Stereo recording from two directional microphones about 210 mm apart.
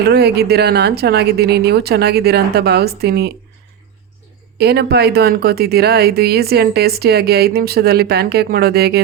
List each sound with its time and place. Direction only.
0.1 s a woman's voice: 50° right (ahead or behind)
4.5 s a woman's voice: 50° right (ahead or behind)